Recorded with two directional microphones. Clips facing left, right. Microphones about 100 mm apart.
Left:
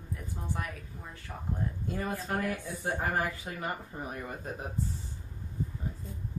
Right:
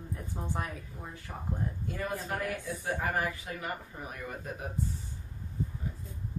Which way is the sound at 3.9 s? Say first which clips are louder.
Left 3 dB; 35° left (ahead or behind).